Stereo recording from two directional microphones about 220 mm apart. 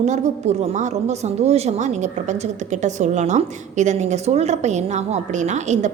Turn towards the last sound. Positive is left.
turn(degrees=-30)  # may be behind; listen again after turning